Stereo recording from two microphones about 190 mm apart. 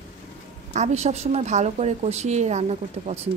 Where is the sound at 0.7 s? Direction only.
35° right (ahead or behind).